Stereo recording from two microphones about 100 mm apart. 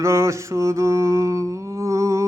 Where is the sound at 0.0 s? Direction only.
30° right (ahead or behind).